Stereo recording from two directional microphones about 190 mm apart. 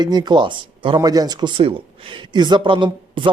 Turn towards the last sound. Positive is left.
turn(degrees=-25)  # may be behind; listen again after turning